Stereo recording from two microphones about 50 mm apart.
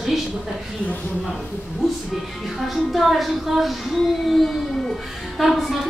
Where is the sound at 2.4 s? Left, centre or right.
Centre.